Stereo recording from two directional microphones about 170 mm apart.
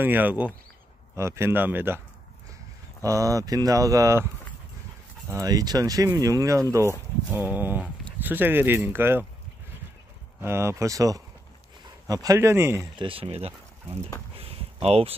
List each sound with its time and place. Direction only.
0.0 s speech: 10° right (ahead or behind)
3.0 s speech: 20° right (ahead or behind)
5.3 s speech: 20° right (ahead or behind)
10.4 s speech: 15° right (ahead or behind)
12.9 s speech: 30° right (ahead or behind)
14.4 s a sound: 35° right (ahead or behind)